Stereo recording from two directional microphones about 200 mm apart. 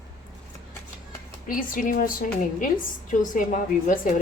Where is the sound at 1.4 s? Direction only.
45° left (ahead or behind).